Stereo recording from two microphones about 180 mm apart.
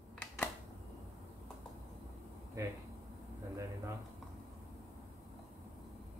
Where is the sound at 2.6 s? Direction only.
20° right (ahead or behind).